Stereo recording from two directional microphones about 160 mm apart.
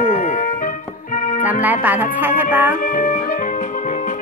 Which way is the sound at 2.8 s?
55° left (ahead or behind).